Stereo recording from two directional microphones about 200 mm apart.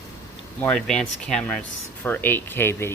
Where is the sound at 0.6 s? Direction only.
5° left (ahead or behind).